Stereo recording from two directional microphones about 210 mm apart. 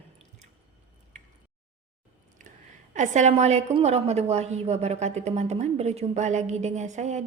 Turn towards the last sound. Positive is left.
turn(degrees=-35)  # may be behind; listen again after turning